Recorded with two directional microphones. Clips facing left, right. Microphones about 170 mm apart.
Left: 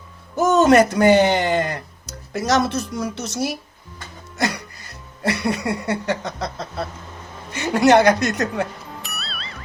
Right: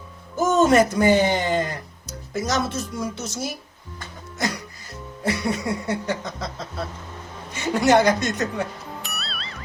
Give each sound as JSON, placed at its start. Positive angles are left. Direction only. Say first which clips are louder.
{"t": 0.3, "sound": "speech", "louder": "left 3 dB", "side_deg": 70}
{"t": 5.2, "sound": "a sound", "louder": "left 2 dB", "side_deg": 70}
{"t": 9.0, "sound": "music", "louder": "even", "side_deg": 0}